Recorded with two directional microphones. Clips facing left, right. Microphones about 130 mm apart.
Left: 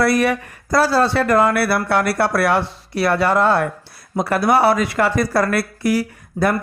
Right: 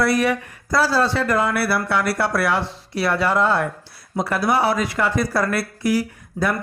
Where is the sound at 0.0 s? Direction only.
65° left (ahead or behind).